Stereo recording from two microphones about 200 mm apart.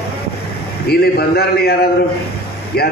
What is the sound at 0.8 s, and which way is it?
A man's voice, 50° left (ahead or behind).